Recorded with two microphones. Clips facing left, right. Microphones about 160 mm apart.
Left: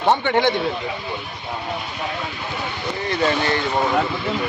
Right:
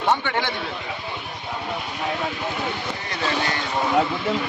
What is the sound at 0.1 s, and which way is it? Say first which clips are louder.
Speech: left 5 dB; 25° left (ahead or behind).